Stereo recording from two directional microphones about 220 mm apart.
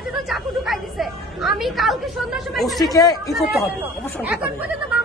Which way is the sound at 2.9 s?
15° left (ahead or behind).